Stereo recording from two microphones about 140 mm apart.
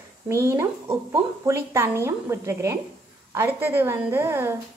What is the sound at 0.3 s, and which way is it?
A woman's voice, 20° right (ahead or behind).